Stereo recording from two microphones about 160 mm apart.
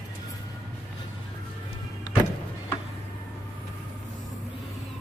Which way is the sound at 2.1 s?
25° left (ahead or behind).